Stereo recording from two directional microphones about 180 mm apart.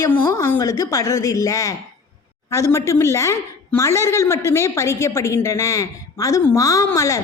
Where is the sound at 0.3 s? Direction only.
15° left (ahead or behind).